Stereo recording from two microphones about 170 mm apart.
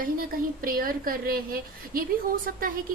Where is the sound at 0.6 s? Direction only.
55° right (ahead or behind).